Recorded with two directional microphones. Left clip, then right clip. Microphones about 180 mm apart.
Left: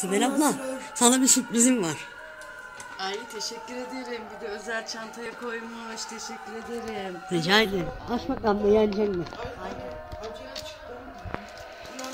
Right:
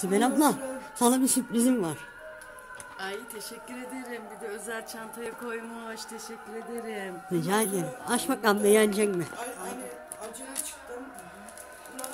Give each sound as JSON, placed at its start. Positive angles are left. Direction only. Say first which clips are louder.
{"t": 0.0, "sound": "speech", "louder": "even", "side_deg": -30}
{"t": 0.9, "sound": "speech", "louder": "left 4 dB", "side_deg": -10}
{"t": 3.0, "sound": "speech", "louder": "left 5 dB", "side_deg": -10}
{"t": 7.3, "sound": "speech", "louder": "left 5 dB", "side_deg": -10}